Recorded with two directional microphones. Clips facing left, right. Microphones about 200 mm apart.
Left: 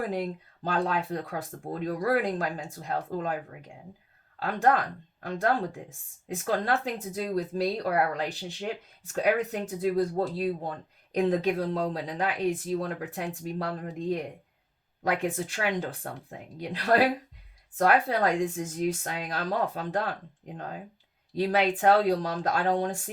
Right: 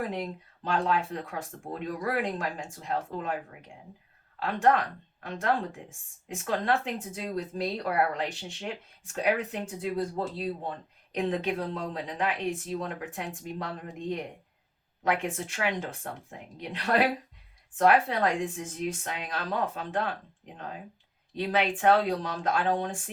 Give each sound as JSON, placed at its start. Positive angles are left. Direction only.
{"t": 0.1, "sound": "speech", "side_deg": 35}
{"t": 4.4, "sound": "speech", "side_deg": 35}
{"t": 21.3, "sound": "speech", "side_deg": 35}